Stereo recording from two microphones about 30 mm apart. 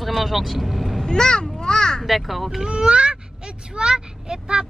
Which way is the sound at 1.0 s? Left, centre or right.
Left.